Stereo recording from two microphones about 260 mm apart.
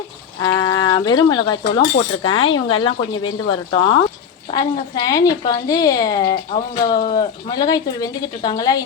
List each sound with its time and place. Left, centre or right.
0.4 s a woman's voice: centre